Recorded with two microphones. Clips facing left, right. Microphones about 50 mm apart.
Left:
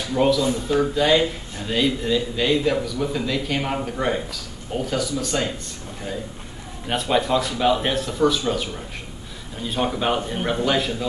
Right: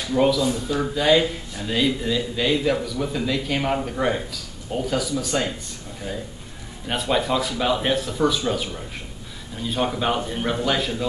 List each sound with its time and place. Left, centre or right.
0.1 s speech: centre
0.4 s speech: left
0.7 s speech: centre
6.9 s speech: centre